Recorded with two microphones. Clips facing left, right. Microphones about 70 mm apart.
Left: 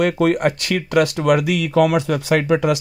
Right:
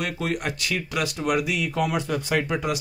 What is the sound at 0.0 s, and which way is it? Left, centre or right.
Speech, left.